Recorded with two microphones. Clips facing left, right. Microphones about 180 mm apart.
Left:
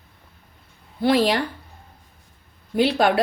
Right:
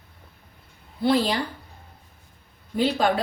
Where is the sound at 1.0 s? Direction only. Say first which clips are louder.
Left 3 dB; 75° left (ahead or behind).